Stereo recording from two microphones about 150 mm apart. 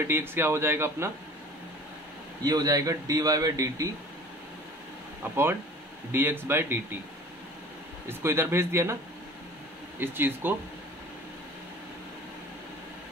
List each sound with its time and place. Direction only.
0.0 s a man's voice: 15° right (ahead or behind)
2.4 s speech: 25° right (ahead or behind)
5.2 s a man's voice: 15° right (ahead or behind)
8.1 s a man's voice: 15° right (ahead or behind)
9.9 s a man's voice: 15° right (ahead or behind)